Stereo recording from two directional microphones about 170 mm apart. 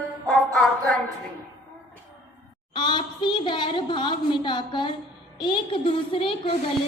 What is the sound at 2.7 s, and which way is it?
A woman's voice, 25° left (ahead or behind).